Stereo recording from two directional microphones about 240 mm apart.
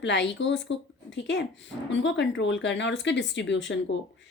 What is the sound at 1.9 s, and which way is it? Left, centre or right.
Speech, left.